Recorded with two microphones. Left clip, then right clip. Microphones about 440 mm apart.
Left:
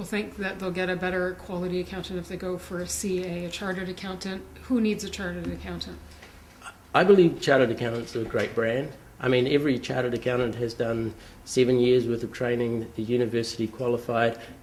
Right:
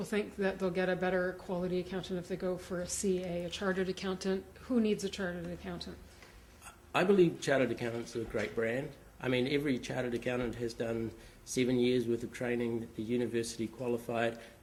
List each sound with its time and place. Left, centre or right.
0.0 s a woman's voice: right
6.7 s speech: left